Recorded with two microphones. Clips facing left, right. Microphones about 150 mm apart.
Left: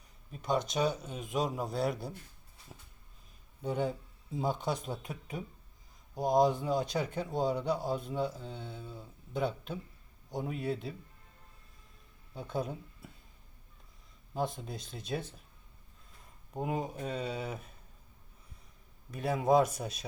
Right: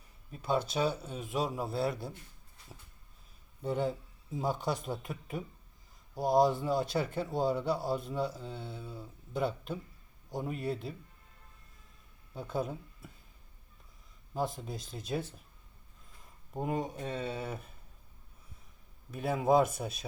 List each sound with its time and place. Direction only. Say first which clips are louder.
0.3 s a man's voice: even; centre (ahead or behind)
3.6 s a man's voice: right 1 dB; centre (ahead or behind)
12.3 s speech: right 1 dB; centre (ahead or behind)
14.3 s a man's voice: even; centre (ahead or behind)
16.5 s a man's voice: right 1 dB; centre (ahead or behind)
19.1 s a man's voice: even; centre (ahead or behind)